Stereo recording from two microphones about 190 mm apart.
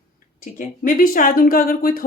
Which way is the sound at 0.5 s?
45° left (ahead or behind).